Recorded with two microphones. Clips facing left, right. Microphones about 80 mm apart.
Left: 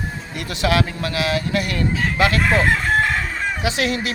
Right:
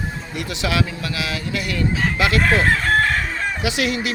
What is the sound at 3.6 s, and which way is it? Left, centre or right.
Speech, left.